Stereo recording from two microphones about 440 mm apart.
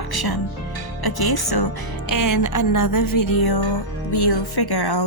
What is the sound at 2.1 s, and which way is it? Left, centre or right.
Music, left.